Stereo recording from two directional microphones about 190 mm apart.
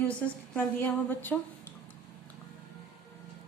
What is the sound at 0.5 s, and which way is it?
Speech, 10° left (ahead or behind).